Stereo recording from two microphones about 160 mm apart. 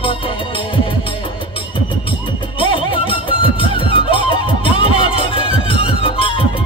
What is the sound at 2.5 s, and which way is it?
Music, 35° left (ahead or behind).